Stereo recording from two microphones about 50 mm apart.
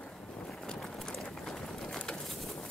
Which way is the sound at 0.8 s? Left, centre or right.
Centre.